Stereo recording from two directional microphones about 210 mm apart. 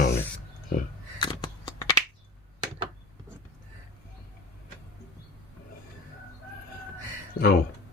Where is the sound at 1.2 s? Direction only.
25° left (ahead or behind).